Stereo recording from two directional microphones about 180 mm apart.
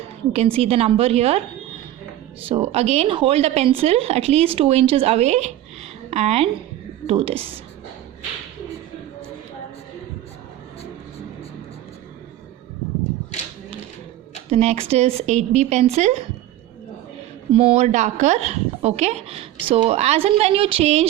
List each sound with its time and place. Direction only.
0.3 s a woman's voice: 35° right (ahead or behind)
2.4 s a woman's voice: 35° right (ahead or behind)
14.5 s a woman's voice: 35° right (ahead or behind)
17.5 s a woman's voice: 30° right (ahead or behind)